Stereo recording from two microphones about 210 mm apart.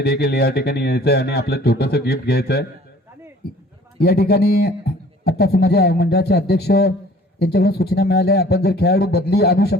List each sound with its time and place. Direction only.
0.0 s speech: 50° left (ahead or behind)
3.9 s speech: 50° left (ahead or behind)